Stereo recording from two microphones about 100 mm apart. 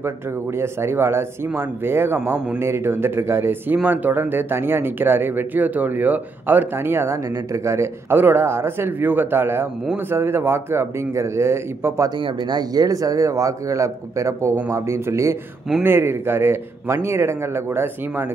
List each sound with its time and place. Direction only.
0.6 s speech: 25° right (ahead or behind)
12.2 s speech: 50° right (ahead or behind); by 18.2 s 20° right (ahead or behind)